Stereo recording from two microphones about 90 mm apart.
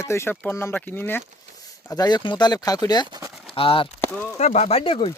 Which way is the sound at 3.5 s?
90° left.